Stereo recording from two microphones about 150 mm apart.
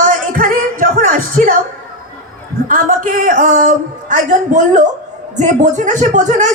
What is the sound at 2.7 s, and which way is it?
A man's voice, 65° right (ahead or behind).